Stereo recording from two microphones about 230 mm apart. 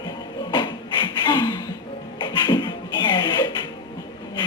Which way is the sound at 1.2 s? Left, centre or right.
Centre.